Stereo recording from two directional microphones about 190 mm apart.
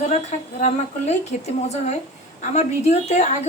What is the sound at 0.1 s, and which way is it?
A woman's voice, 40° left (ahead or behind).